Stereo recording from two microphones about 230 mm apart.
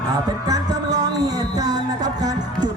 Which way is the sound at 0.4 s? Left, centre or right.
Centre.